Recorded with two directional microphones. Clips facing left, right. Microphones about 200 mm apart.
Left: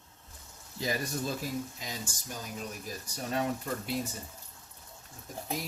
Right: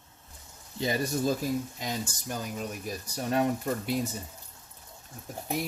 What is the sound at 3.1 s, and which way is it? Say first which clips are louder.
Speech: right 5 dB; 55° right (ahead or behind).